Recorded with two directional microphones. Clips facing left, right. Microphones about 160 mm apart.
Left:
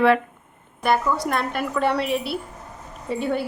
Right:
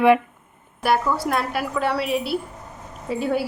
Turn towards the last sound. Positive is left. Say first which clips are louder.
# right 1 dB
turn(degrees=-5)  # may be behind; listen again after turning